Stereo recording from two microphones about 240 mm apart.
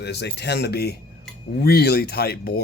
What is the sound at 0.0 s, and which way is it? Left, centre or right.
Speech, left.